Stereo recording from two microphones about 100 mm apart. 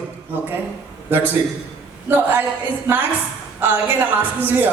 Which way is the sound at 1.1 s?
20° right (ahead or behind).